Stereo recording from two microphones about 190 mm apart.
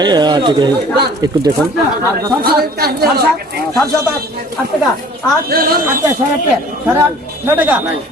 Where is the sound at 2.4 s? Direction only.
55° right (ahead or behind).